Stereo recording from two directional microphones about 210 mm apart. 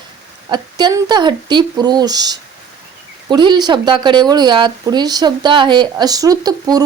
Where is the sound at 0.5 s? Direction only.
20° right (ahead or behind).